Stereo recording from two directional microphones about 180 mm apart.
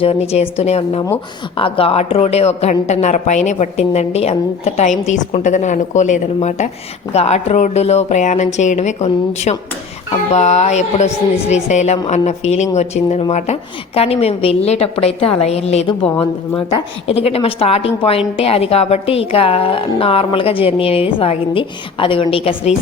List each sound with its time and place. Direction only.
0.0 s a woman's voice: 35° left (ahead or behind)
17.1 s a woman's voice: 35° left (ahead or behind)